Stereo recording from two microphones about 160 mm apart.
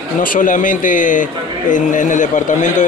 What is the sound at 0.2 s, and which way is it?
A man's voice, 60° left (ahead or behind).